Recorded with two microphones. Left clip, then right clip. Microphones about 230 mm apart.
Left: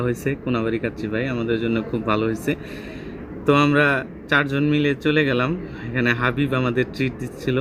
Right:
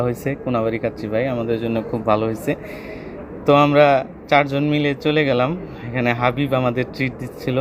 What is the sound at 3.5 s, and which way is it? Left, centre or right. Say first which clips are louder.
Speech: right 4 dB; centre.